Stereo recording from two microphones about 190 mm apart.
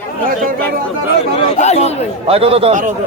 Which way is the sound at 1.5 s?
35° left (ahead or behind).